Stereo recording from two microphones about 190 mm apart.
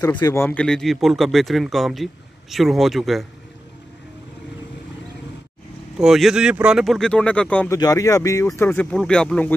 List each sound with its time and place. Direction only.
0.0 s speech: 15° left (ahead or behind); by 3.3 s centre (ahead or behind)
5.9 s speech: centre (ahead or behind)
7.7 s speech: 20° left (ahead or behind)